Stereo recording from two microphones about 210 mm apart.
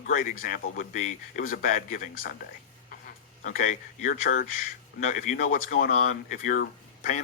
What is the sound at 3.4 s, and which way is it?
Speech, 40° left (ahead or behind).